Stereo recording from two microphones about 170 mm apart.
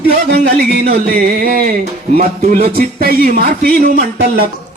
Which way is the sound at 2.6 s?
60° right (ahead or behind).